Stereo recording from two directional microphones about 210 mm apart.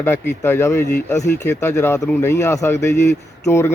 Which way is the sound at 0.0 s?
10° left (ahead or behind).